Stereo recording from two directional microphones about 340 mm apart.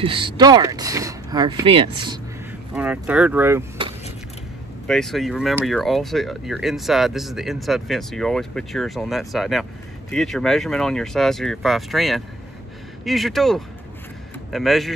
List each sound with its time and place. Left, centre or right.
0.0 s speech: centre
2.7 s speech: centre
4.8 s speech: centre